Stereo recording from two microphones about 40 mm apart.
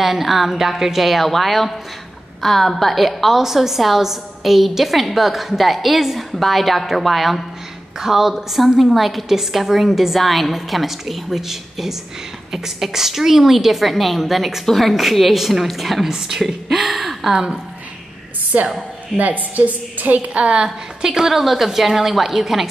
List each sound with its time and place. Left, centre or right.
0.0 s a woman's voice: centre
18.5 s a woman's voice: right
20.3 s a woman's voice: right; by 22.7 s centre